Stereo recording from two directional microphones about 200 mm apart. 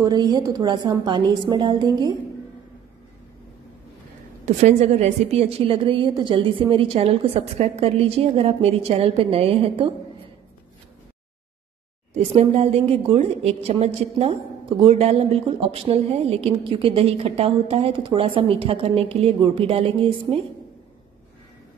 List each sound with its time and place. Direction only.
0.0 s a woman's voice: 20° right (ahead or behind)
4.5 s a woman's voice: 35° right (ahead or behind)
12.4 s a woman's voice: 30° right (ahead or behind)